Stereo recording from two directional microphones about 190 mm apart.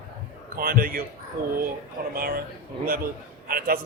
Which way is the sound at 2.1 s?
50° right (ahead or behind).